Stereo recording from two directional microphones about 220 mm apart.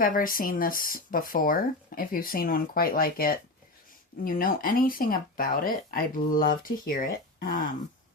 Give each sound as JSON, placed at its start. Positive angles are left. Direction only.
{"t": 0.0, "sound": "speech", "side_deg": 40}